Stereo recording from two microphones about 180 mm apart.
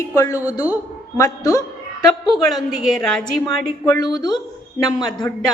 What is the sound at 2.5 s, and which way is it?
Speech, centre (ahead or behind).